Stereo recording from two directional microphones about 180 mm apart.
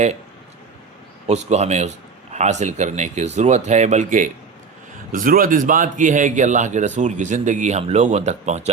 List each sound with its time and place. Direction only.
1.3 s a man's voice: 40° right (ahead or behind)